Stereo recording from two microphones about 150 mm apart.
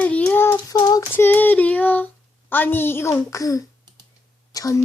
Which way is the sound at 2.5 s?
15° left (ahead or behind).